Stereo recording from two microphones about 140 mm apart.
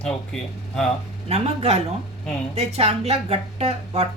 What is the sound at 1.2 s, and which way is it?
Speech, 50° right (ahead or behind).